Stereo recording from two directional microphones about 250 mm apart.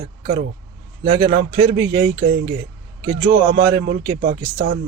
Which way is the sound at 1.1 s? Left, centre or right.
Centre.